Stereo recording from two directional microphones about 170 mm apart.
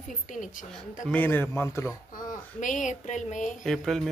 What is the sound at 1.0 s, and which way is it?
Speech, 10° left (ahead or behind).